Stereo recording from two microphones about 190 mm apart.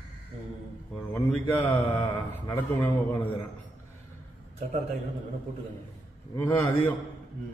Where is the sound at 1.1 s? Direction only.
10° left (ahead or behind).